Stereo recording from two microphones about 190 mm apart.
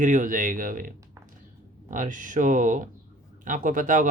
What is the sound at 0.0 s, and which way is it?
Speech, 45° right (ahead or behind).